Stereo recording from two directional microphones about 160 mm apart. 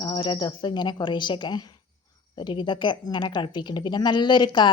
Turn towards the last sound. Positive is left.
turn(degrees=30)  # may be behind; listen again after turning